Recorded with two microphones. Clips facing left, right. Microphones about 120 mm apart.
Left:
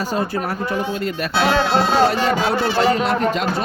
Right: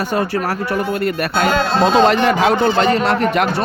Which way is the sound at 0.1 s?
80° right.